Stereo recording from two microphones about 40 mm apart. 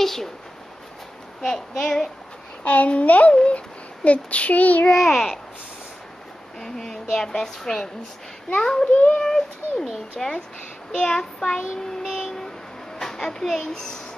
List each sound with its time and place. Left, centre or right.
0.0 s speech: centre
1.4 s a woman's voice: centre
2.6 s a child's voice: left
3.3 s child singing: left
4.9 s a woman's voice: centre
6.6 s a woman's voice: centre
8.9 s a child's voice: left
9.2 s a woman's voice: centre
13.0 s a child's voice: centre